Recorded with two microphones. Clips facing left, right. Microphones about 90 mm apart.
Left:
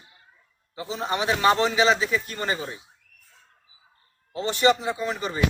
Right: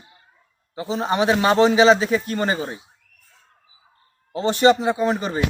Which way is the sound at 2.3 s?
35° right (ahead or behind).